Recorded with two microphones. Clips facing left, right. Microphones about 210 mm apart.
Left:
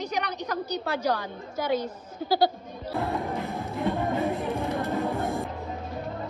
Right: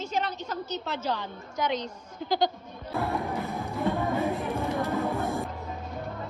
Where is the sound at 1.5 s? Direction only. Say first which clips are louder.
Left 2 dB; 5° left (ahead or behind).